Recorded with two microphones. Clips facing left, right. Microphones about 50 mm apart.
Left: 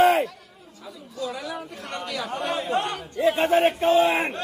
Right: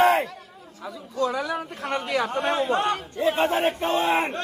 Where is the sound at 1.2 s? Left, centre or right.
Right.